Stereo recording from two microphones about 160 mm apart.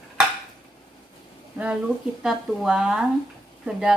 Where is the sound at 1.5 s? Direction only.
5° right (ahead or behind).